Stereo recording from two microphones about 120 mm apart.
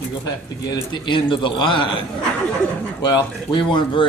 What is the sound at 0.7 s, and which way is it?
A man's voice, 40° left (ahead or behind).